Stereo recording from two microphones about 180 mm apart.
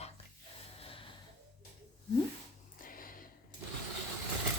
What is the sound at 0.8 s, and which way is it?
Snort, 30° left (ahead or behind).